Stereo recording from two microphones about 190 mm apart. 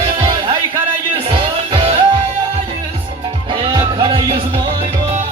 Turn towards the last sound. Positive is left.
turn(degrees=-25)  # may be behind; listen again after turning